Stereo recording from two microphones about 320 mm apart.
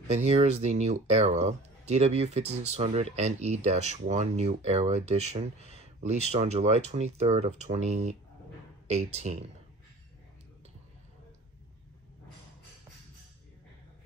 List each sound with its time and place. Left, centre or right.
0.1 s speech: right